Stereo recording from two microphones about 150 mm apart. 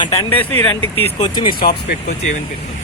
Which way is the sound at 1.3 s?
35° left (ahead or behind).